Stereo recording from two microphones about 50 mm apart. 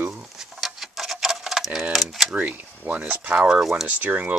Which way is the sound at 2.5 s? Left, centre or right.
Right.